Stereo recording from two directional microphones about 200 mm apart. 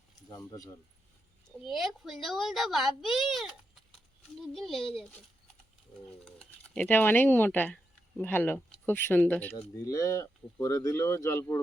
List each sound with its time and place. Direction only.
0.3 s speech: 15° left (ahead or behind)
1.6 s a child's voice: centre (ahead or behind)
6.2 s speech: 5° left (ahead or behind)